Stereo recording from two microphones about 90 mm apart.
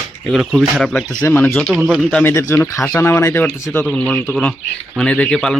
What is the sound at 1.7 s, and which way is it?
Speech, 15° right (ahead or behind).